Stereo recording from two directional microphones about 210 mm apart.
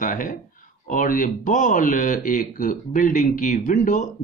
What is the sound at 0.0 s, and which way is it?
Speech, 40° left (ahead or behind).